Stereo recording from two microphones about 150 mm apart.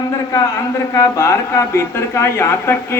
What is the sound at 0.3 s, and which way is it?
Speech, 20° left (ahead or behind).